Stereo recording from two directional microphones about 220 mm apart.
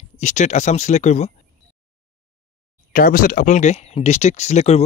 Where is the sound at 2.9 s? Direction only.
40° left (ahead or behind).